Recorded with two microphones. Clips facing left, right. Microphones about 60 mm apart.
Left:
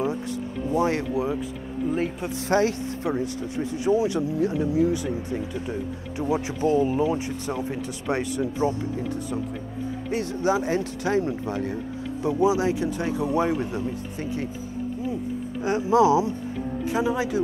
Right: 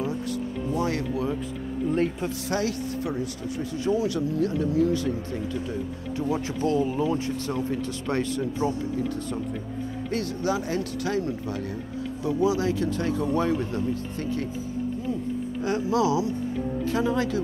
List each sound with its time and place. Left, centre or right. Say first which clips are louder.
0.7 s speech: left 4 dB; left
1.9 s speech: right 1 dB; centre
2.4 s speech: left 7 dB; left
10.1 s speech: left 3 dB; left
15.6 s speech: left 5 dB; left
16.9 s a man's voice: left 1 dB; centre